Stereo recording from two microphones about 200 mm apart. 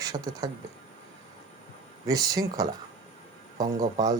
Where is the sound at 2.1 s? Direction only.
15° right (ahead or behind).